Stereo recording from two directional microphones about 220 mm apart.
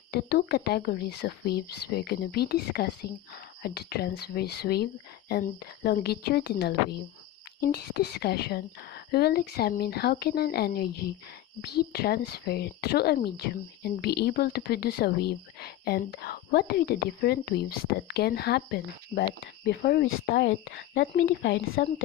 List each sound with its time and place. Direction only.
0.1 s speech: 45° left (ahead or behind)